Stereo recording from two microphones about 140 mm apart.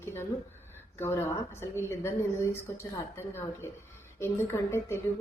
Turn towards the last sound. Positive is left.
turn(degrees=15)  # may be behind; listen again after turning